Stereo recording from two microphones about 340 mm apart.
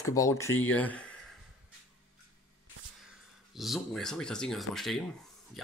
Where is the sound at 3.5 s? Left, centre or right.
Centre.